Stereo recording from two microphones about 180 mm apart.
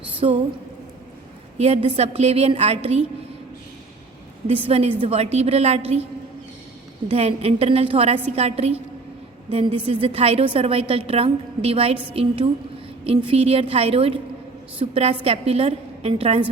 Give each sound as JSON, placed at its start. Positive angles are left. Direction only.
{"t": 0.2, "sound": "a sound", "side_deg": -30}
{"t": 1.5, "sound": "a woman's voice", "side_deg": -35}
{"t": 4.4, "sound": "a woman's voice", "side_deg": -35}
{"t": 7.1, "sound": "a woman's voice", "side_deg": -35}